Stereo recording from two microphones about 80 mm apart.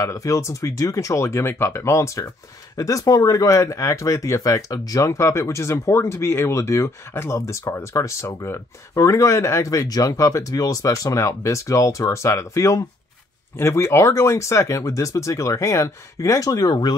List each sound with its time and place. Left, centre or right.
0.0 s speech: left